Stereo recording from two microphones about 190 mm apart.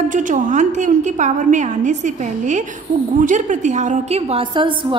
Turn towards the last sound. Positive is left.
turn(degrees=-25)  # may be behind; listen again after turning